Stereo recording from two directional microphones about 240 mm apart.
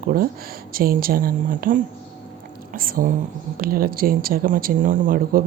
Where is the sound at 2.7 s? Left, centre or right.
Right.